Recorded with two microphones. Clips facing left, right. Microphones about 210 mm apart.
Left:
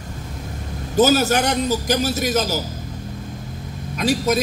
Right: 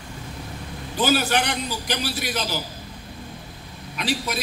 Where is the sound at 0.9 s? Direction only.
45° left (ahead or behind).